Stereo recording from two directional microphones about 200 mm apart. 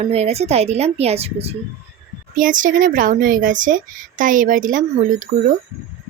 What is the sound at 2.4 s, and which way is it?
Speech, 40° right (ahead or behind).